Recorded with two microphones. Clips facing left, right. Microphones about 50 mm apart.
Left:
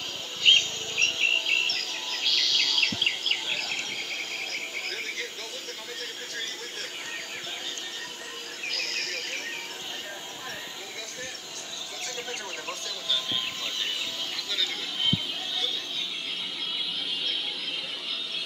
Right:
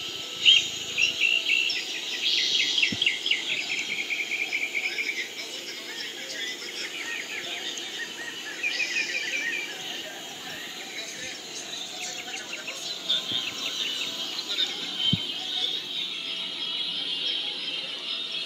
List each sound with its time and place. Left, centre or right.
0.4 s a sound: centre
3.5 s cricket: right
8.6 s insect: right
14.5 s music: centre